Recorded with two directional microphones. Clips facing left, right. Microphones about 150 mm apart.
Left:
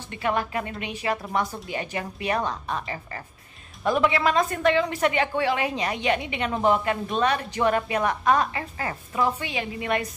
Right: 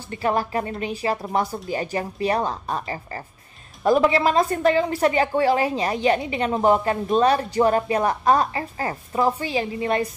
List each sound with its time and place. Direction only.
0.1 s a woman's voice: 35° right (ahead or behind)